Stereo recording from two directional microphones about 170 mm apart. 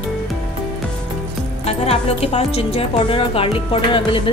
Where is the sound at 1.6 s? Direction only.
35° left (ahead or behind).